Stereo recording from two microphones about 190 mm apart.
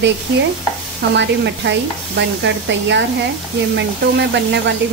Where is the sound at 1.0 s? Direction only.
70° right (ahead or behind).